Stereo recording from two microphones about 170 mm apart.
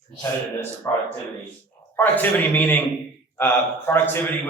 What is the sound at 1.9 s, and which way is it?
Speech, 10° left (ahead or behind).